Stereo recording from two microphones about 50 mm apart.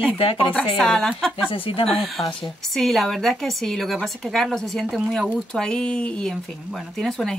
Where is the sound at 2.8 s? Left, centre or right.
Centre.